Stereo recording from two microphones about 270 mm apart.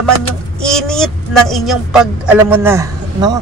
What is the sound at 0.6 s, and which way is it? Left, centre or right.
A woman's voice, centre.